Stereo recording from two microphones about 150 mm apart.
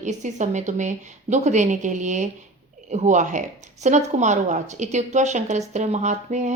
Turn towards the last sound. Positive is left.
turn(degrees=-50)  # may be behind; listen again after turning